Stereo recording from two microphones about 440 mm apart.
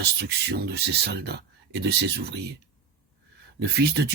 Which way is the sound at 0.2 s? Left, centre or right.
Right.